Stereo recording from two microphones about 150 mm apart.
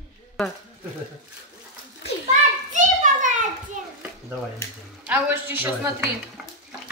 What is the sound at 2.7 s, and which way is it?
Children playing, 55° right (ahead or behind).